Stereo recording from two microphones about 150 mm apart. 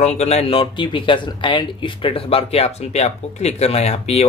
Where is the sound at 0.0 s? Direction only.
50° left (ahead or behind).